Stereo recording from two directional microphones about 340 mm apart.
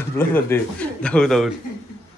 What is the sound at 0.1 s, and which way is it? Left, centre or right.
A man's voice, centre.